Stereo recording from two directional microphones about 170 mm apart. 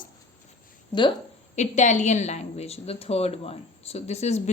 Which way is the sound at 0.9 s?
25° left (ahead or behind).